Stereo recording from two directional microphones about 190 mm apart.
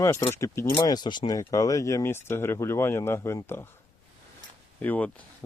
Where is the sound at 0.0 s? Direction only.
15° left (ahead or behind).